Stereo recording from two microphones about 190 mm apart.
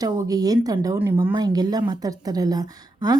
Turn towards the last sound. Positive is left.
turn(degrees=-20)  # may be behind; listen again after turning